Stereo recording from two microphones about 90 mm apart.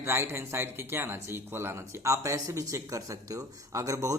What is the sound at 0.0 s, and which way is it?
Speech, 25° right (ahead or behind).